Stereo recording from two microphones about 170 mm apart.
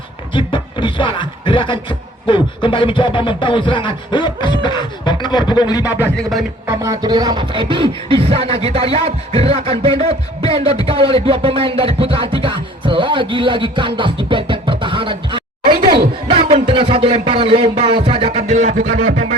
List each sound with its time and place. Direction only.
0.3 s beatboxing: 30° left (ahead or behind)
2.2 s speech: 30° left (ahead or behind)
6.7 s music: 20° right (ahead or behind)
14.3 s speech: 30° right (ahead or behind)
16.5 s music: 35° right (ahead or behind); by 19.3 s 50° right (ahead or behind)